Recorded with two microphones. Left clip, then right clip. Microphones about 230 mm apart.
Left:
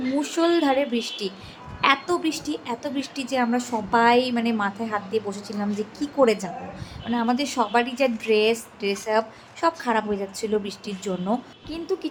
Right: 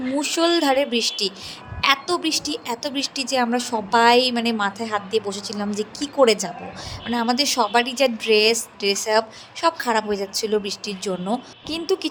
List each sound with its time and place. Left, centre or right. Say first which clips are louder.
0.2 s a woman's voice: right 2 dB; right